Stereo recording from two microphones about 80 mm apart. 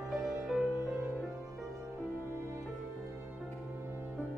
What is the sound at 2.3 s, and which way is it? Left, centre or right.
Music, right.